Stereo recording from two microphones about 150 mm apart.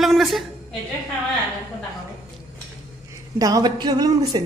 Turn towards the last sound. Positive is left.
turn(degrees=-25)  # may be behind; listen again after turning